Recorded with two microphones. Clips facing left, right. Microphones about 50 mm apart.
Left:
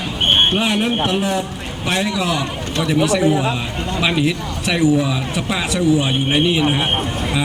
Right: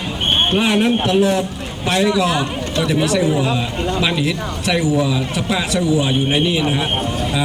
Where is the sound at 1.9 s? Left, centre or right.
Centre.